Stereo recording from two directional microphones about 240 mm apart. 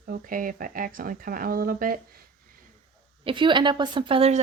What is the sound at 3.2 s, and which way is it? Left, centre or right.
A woman's voice, centre.